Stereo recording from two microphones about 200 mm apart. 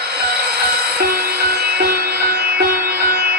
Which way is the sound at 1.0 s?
50° right (ahead or behind).